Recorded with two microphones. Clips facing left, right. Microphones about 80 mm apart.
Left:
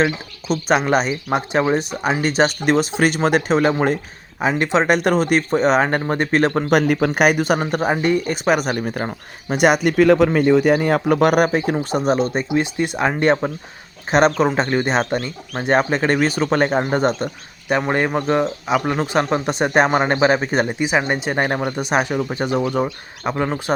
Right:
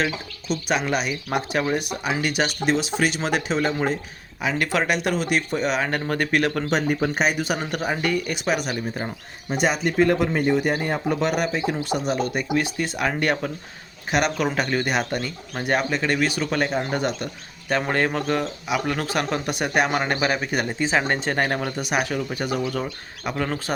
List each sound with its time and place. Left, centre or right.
0.5 s speech: left
1.3 s speech: left
2.6 s speech: left
4.4 s speech: left
4.6 s speech: left
4.9 s speech: left
6.7 s speech: left
8.0 s speech: left
8.4 s speech: left
9.5 s speech: left
17.7 s speech: centre
20.7 s speech: centre